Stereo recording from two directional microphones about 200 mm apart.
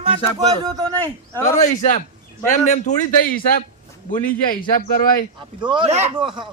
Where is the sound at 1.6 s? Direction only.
40° left (ahead or behind).